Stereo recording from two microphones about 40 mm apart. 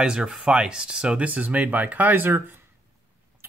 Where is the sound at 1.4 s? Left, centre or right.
Right.